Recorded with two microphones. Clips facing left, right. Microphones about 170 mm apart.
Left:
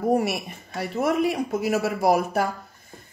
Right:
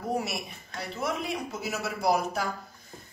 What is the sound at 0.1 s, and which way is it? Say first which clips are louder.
A woman's voice: left 6 dB; 55° left (ahead or behind).